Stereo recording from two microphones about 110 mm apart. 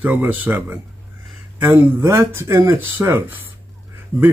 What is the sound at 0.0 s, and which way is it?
A man's voice, 15° right (ahead or behind).